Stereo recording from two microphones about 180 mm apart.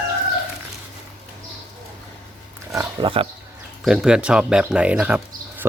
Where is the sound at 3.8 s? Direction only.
5° right (ahead or behind).